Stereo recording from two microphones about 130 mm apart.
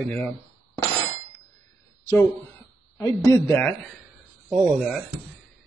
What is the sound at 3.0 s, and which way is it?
Speech, 25° left (ahead or behind).